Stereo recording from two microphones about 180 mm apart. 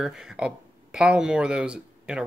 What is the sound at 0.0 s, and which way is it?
Speech, 5° right (ahead or behind).